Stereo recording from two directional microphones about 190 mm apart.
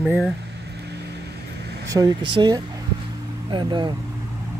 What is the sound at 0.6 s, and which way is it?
Vehicle, 60° right (ahead or behind).